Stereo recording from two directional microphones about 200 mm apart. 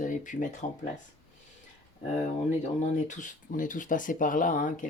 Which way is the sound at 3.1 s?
40° left (ahead or behind).